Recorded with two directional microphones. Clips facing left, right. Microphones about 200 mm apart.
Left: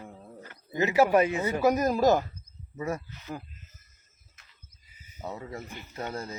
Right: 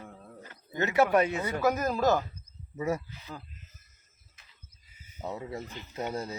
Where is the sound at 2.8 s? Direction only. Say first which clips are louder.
Right 2 dB; 10° right (ahead or behind).